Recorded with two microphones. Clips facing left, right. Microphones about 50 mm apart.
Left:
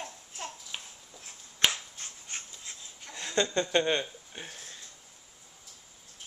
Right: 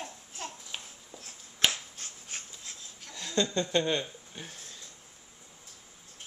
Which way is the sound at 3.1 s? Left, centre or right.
Left.